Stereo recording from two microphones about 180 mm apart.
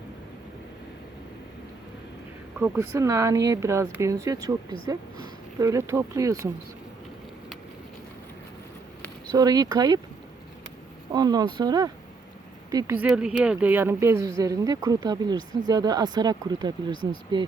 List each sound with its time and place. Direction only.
2.6 s speech: 15° right (ahead or behind)
9.3 s a woman's voice: 20° right (ahead or behind)
11.1 s a woman's voice: 20° right (ahead or behind)
12.7 s a woman's voice: 10° right (ahead or behind)